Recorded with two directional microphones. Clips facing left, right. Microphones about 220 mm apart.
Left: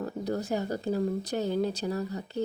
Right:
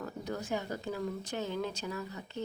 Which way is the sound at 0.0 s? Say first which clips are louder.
Left 7 dB; 35° left (ahead or behind).